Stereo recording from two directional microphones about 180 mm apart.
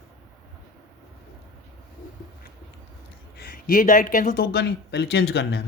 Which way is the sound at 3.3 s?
55° left (ahead or behind).